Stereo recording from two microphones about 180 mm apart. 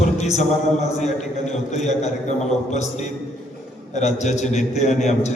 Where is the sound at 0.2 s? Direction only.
40° left (ahead or behind).